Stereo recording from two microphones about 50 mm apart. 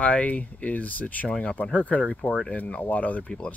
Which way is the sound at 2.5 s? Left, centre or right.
Left.